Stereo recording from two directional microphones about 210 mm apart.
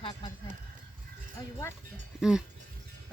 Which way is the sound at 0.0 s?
25° left (ahead or behind).